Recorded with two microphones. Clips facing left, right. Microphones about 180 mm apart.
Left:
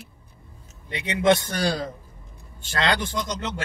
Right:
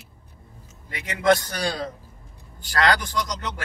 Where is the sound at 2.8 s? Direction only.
25° left (ahead or behind).